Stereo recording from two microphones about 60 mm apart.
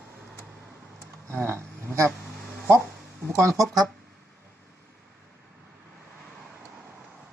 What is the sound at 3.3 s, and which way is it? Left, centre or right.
Speech, right.